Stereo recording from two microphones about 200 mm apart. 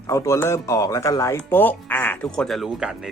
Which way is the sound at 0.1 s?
15° left (ahead or behind).